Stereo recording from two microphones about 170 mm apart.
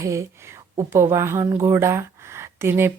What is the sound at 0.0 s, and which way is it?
A woman's voice, 15° right (ahead or behind).